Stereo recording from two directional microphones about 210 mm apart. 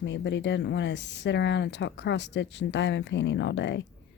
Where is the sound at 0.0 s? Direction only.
60° left (ahead or behind).